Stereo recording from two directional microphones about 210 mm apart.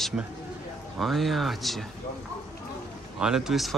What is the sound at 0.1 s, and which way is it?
Speech, 5° right (ahead or behind).